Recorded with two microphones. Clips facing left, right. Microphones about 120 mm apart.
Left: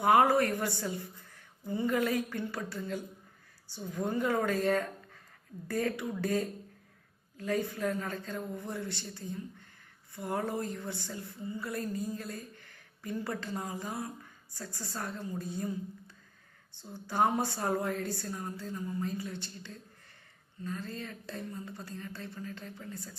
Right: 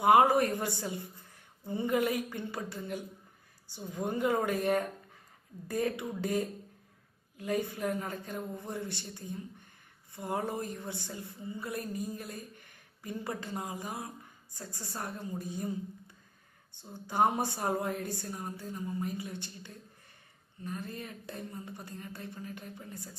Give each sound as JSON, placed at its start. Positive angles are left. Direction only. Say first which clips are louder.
{"t": 0.0, "sound": "a woman's voice", "louder": "right 1 dB", "side_deg": -20}